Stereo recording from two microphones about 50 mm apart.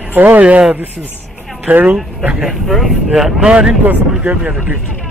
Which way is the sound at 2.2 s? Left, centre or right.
Centre.